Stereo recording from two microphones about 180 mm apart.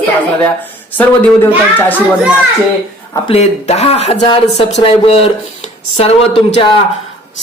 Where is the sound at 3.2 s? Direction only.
35° left (ahead or behind).